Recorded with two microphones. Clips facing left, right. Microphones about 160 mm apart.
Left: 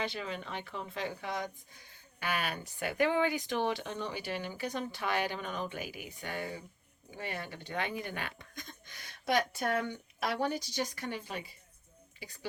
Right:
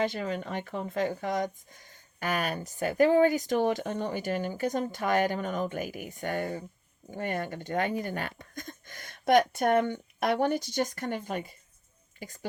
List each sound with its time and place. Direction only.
0.0 s speech: 45° right (ahead or behind)